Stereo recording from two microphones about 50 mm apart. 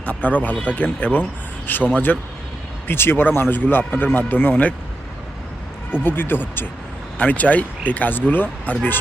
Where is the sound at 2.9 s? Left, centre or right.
Left.